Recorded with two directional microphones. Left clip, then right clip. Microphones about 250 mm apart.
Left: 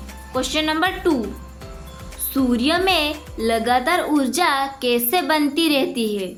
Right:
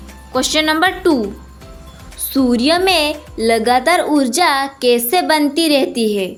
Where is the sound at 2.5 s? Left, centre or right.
Right.